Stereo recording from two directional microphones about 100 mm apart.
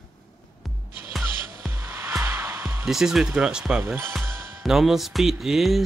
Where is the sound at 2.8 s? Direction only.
5° right (ahead or behind).